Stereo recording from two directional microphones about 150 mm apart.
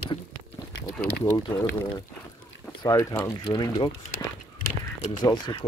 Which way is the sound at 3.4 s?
30° left (ahead or behind).